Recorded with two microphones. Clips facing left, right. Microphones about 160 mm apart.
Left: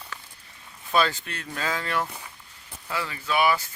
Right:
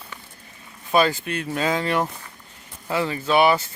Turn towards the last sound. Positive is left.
turn(degrees=-25)  # may be behind; listen again after turning